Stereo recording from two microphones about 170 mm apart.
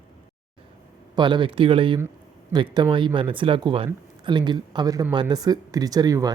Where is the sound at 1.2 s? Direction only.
25° right (ahead or behind).